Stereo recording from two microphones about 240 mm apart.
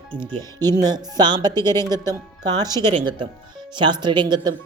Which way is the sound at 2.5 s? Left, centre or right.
Centre.